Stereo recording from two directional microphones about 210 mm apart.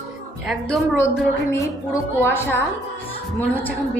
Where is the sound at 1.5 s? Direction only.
15° left (ahead or behind).